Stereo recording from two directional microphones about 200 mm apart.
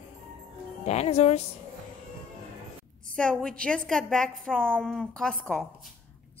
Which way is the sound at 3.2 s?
5° left (ahead or behind).